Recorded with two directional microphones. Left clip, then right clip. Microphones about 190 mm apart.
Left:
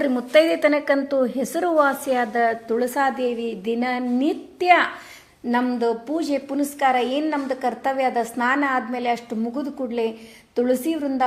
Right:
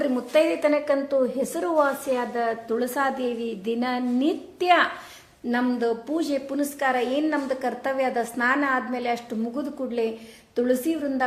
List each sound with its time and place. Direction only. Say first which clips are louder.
0.0 s a woman's voice: left 4 dB; 20° left (ahead or behind)